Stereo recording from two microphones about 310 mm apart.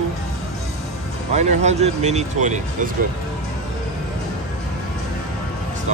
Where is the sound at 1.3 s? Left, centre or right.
Right.